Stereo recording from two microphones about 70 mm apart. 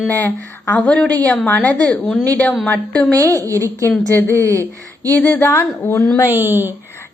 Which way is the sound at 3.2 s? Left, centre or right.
Right.